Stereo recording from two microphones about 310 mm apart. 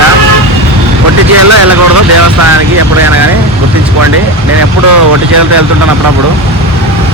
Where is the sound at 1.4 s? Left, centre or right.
Right.